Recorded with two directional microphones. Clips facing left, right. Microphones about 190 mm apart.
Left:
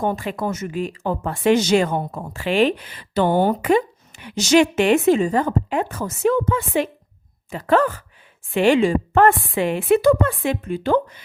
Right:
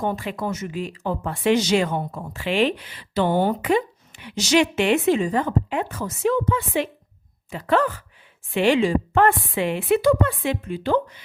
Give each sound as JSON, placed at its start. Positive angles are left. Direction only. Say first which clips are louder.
{"t": 0.0, "sound": "speech", "louder": "left 3 dB", "side_deg": 45}